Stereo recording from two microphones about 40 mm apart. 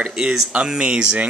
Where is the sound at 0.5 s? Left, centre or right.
Right.